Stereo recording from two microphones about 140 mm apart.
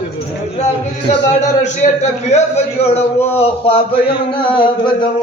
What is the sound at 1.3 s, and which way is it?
Speech, 55° left (ahead or behind).